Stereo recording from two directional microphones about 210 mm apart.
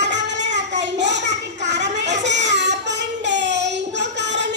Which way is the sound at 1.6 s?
55° right (ahead or behind).